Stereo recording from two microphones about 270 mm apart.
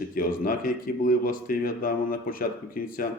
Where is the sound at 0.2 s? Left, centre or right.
Left.